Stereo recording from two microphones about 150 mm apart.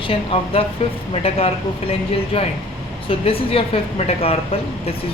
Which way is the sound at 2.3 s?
40° left (ahead or behind).